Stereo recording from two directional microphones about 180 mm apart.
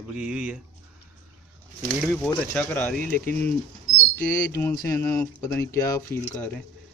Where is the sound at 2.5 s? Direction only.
10° left (ahead or behind).